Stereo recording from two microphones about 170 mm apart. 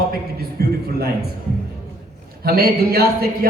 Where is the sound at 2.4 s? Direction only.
65° right (ahead or behind).